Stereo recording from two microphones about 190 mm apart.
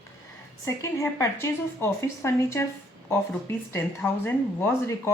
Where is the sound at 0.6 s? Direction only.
15° left (ahead or behind).